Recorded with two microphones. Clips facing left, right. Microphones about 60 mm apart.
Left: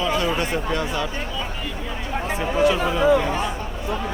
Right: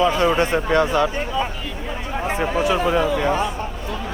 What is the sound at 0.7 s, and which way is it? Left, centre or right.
Speech, right.